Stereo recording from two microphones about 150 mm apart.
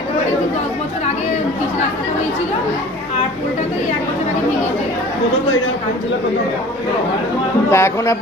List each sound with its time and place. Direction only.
7.7 s speech: 20° left (ahead or behind)